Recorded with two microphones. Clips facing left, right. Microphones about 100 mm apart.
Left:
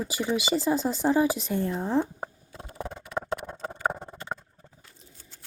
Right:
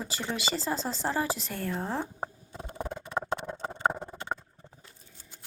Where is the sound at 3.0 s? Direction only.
25° right (ahead or behind).